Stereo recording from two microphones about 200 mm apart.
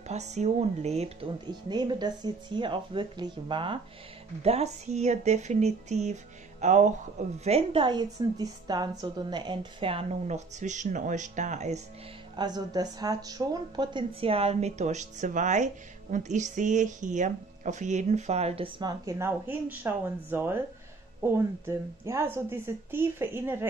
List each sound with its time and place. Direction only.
0.1 s speech: 35° right (ahead or behind)
12.4 s speech: 20° right (ahead or behind)